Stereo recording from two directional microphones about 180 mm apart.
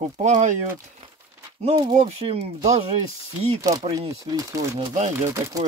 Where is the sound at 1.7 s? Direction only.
25° right (ahead or behind).